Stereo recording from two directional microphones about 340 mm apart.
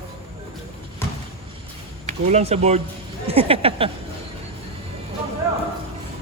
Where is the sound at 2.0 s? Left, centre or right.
Centre.